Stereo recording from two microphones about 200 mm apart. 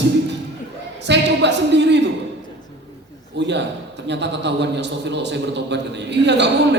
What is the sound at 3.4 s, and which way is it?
A man's voice, 60° right (ahead or behind).